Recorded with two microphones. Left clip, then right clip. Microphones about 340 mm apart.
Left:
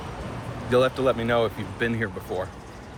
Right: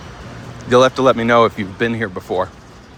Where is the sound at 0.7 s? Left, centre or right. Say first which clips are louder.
Right 9 dB; centre.